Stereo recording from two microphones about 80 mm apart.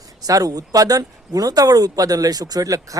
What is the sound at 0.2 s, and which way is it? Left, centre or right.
Speech, right.